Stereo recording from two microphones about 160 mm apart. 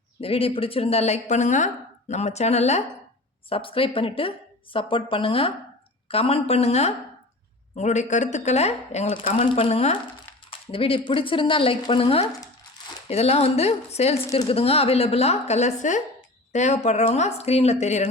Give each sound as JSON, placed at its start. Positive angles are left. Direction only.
{"t": 0.2, "sound": "a woman's voice", "side_deg": 35}